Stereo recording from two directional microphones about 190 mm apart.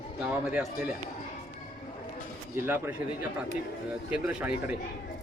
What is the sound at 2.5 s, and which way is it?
Speech, 10° right (ahead or behind).